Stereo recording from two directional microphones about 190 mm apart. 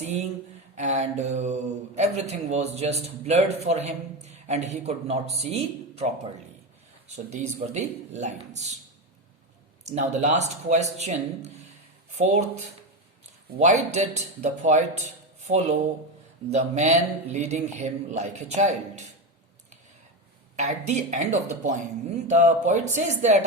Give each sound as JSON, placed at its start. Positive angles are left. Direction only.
{"t": 0.0, "sound": "a man's voice", "side_deg": -35}
{"t": 7.3, "sound": "a man's voice", "side_deg": -35}
{"t": 9.8, "sound": "a man's voice", "side_deg": -35}
{"t": 13.6, "sound": "a man's voice", "side_deg": -35}
{"t": 20.6, "sound": "a man's voice", "side_deg": -35}